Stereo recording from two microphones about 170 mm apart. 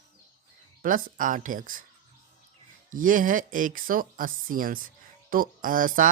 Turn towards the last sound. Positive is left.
turn(degrees=-55)  # may be behind; listen again after turning